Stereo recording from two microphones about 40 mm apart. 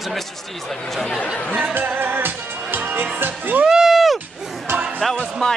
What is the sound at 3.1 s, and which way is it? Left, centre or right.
Speech, right.